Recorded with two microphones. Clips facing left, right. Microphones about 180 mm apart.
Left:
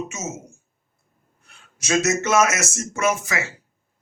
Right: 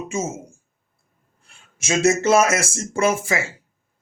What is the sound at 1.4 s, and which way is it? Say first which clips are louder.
Speech: right 3 dB; 25° right (ahead or behind).